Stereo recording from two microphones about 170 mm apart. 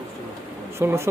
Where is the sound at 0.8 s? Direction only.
15° right (ahead or behind).